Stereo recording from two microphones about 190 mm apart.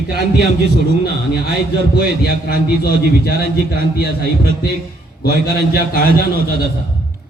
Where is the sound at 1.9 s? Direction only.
55° left (ahead or behind).